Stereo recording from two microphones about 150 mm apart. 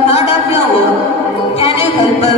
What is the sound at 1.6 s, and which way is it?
Music, 45° left (ahead or behind).